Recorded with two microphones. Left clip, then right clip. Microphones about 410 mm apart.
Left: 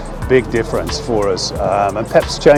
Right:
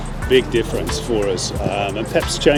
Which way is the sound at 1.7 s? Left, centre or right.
Left.